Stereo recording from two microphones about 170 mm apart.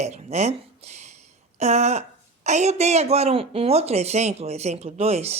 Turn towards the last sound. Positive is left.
turn(degrees=-40)  # may be behind; listen again after turning